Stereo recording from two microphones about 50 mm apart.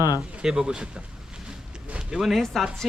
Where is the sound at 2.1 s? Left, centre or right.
Centre.